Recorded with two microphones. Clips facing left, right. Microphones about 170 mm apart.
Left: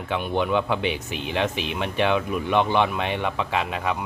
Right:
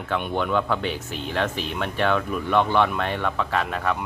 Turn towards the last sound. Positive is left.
turn(degrees=10)  # may be behind; listen again after turning